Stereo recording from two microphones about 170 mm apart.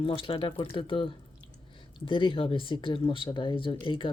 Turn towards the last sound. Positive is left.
turn(degrees=30)  # may be behind; listen again after turning